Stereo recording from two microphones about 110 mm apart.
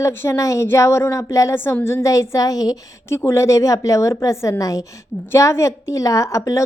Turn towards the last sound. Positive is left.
turn(degrees=30)  # may be behind; listen again after turning